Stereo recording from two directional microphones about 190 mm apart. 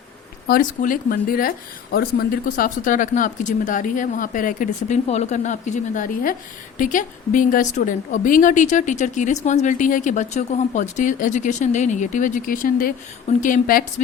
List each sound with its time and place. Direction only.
0.4 s a woman's voice: 50° left (ahead or behind)